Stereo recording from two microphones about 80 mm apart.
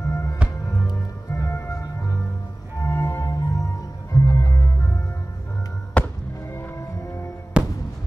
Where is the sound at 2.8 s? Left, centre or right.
Left.